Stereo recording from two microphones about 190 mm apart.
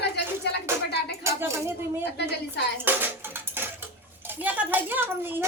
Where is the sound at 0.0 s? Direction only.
60° left (ahead or behind).